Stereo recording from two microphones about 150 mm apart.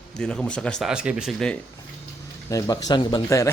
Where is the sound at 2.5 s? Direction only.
25° left (ahead or behind).